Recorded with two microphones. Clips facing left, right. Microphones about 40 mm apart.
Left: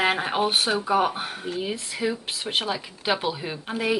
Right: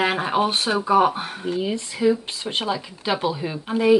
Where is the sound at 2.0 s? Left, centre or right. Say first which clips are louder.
Right 8 dB; left.